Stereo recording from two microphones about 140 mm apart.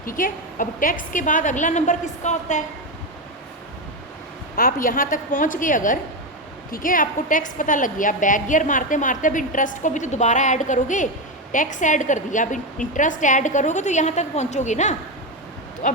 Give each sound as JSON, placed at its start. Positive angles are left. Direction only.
{"t": 0.0, "sound": "a woman's voice", "side_deg": 75}
{"t": 4.5, "sound": "a woman's voice", "side_deg": 85}
{"t": 6.7, "sound": "a woman's voice", "side_deg": 85}
{"t": 15.8, "sound": "a woman's voice", "side_deg": 70}